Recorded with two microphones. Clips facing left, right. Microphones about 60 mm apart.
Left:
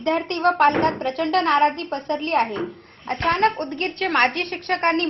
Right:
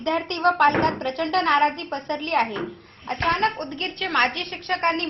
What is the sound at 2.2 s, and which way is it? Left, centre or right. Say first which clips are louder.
A woman's voice: left 1 dB; left.